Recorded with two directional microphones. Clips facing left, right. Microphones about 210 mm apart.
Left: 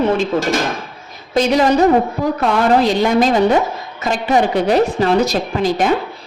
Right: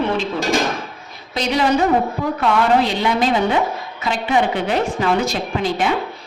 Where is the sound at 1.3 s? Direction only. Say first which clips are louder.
Left 5 dB; 45° left (ahead or behind).